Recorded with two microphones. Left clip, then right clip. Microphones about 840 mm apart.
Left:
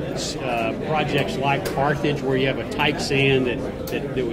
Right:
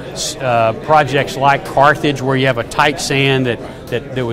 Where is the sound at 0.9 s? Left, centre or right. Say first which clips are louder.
Right 8 dB; right.